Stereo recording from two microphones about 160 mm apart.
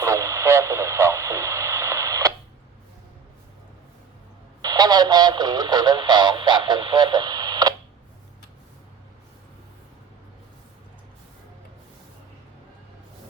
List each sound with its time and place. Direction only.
0.0 s radio: 20° right (ahead or behind)
4.6 s radio: 25° right (ahead or behind)